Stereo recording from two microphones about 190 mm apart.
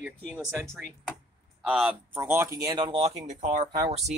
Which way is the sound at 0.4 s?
15° right (ahead or behind).